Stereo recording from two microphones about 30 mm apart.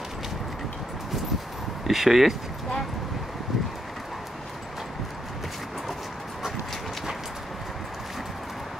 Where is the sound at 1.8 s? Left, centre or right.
Centre.